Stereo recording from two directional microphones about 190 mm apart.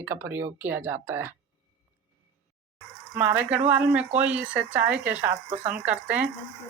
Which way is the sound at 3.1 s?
10° right (ahead or behind).